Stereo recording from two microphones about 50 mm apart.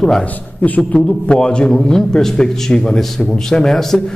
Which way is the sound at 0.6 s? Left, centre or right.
Left.